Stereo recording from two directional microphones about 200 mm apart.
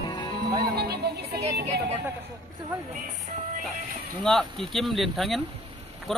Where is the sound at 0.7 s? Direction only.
55° right (ahead or behind).